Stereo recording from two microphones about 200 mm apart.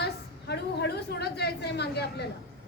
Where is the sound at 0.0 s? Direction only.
55° left (ahead or behind).